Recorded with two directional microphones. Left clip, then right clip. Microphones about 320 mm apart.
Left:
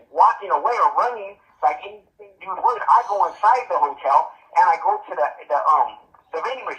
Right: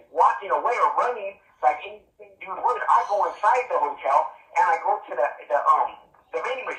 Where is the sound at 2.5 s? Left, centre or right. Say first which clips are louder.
Left 4 dB; centre.